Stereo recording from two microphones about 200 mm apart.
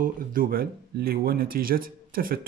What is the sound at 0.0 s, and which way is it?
Speech, 45° right (ahead or behind).